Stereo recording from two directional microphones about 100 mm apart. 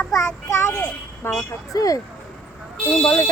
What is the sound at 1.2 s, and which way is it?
Speech, 25° left (ahead or behind).